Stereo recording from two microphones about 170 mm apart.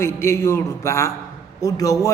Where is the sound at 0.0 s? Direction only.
15° left (ahead or behind).